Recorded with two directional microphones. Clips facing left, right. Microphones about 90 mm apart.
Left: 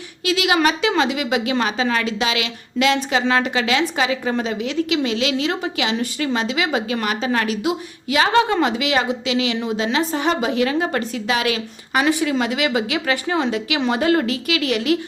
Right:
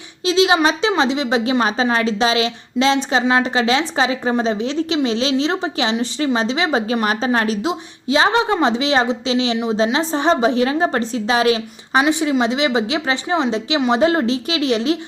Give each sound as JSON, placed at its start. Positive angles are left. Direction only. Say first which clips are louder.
{"t": 0.3, "sound": "a woman's voice", "louder": "right 3 dB", "side_deg": -25}